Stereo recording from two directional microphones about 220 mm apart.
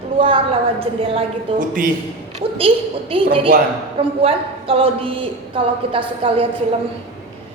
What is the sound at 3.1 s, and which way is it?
A woman's voice, 25° right (ahead or behind).